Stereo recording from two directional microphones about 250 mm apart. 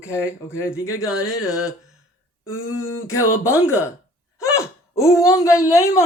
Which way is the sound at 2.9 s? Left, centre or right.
Centre.